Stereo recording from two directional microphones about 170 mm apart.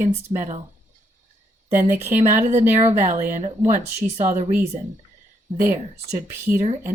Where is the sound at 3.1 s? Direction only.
50° right (ahead or behind).